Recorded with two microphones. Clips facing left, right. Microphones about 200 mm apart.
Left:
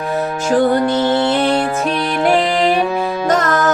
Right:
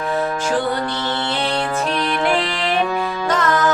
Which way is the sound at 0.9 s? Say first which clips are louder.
Left 9 dB; 20° left (ahead or behind).